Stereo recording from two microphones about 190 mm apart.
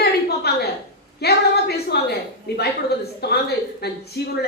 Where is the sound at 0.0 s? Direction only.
60° left (ahead or behind).